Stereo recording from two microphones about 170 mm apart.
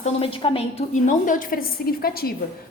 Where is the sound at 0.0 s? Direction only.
35° left (ahead or behind).